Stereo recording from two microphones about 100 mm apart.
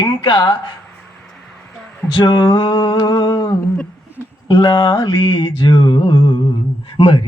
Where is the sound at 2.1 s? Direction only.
50° left (ahead or behind).